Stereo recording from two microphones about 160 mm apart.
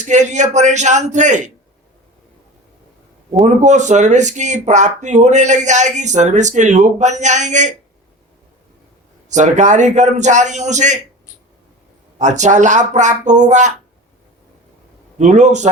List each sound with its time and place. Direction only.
0.0 s speech: 50° right (ahead or behind)
3.6 s speech: 50° right (ahead or behind)
9.3 s speech: 50° right (ahead or behind)
12.2 s speech: 50° right (ahead or behind)
15.2 s speech: 45° right (ahead or behind)